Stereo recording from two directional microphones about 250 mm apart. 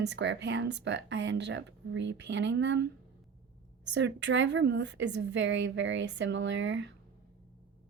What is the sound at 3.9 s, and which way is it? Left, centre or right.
A woman's voice, right.